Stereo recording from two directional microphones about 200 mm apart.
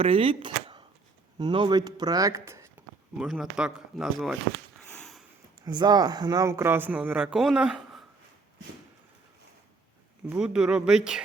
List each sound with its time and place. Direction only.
0.0 s speech: 30° right (ahead or behind)
3.2 s speech: centre (ahead or behind)
4.8 s sniff: 5° left (ahead or behind)
5.6 s speech: 20° right (ahead or behind); by 8.0 s 5° right (ahead or behind)
10.2 s speech: 5° right (ahead or behind)